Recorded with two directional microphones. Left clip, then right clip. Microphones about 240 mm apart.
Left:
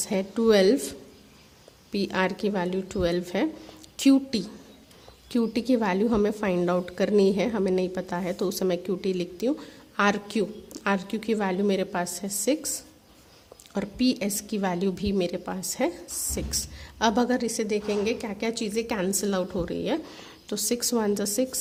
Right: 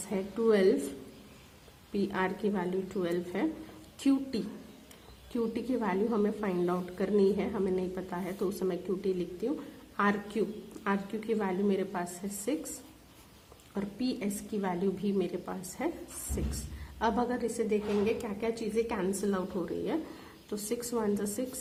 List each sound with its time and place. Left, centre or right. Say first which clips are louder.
0.1 s a woman's voice: left 6 dB; left
1.9 s a woman's voice: left 6 dB; left
13.7 s a woman's voice: left 9 dB; left
17.0 s a woman's voice: left 6 dB; left